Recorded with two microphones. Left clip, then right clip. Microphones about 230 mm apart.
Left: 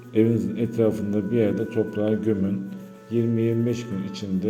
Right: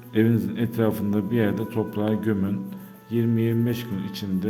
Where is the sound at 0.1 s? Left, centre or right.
Right.